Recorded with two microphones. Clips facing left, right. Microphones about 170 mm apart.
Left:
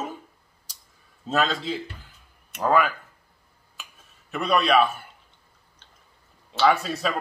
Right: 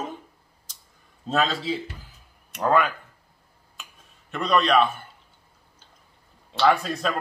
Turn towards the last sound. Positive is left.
turn(degrees=5)  # may be behind; listen again after turning